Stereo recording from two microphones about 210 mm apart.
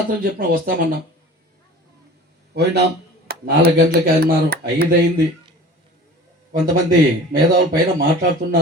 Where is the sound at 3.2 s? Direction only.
45° right (ahead or behind).